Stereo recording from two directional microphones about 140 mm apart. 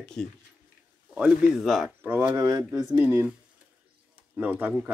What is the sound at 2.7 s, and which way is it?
Speech, 10° right (ahead or behind).